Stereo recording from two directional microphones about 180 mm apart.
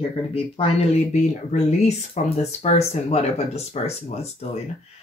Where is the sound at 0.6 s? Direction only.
30° left (ahead or behind).